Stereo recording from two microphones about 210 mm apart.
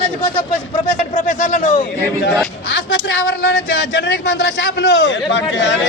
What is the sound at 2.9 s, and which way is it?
Speech, 50° left (ahead or behind).